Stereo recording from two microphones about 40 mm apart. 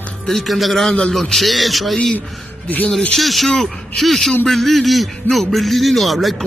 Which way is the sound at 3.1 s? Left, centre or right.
Centre.